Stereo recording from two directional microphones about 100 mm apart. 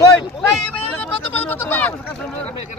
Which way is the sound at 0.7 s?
15° left (ahead or behind).